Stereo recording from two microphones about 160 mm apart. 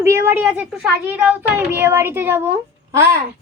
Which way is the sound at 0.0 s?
15° right (ahead or behind).